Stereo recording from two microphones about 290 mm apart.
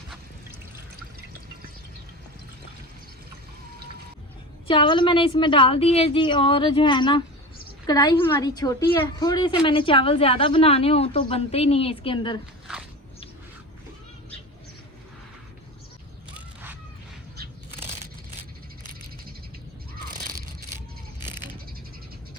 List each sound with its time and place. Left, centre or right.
4.7 s a woman's voice: centre